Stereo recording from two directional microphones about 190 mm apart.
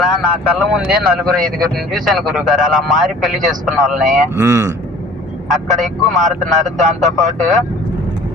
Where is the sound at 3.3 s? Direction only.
45° right (ahead or behind).